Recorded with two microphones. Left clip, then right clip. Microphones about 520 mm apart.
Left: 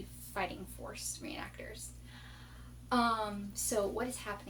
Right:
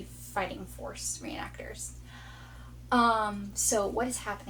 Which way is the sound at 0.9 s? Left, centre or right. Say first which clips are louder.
Right 4 dB; left.